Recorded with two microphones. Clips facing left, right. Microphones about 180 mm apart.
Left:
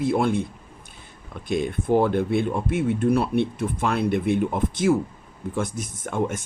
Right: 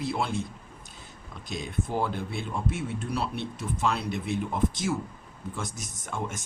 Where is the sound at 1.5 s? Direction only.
55° left (ahead or behind).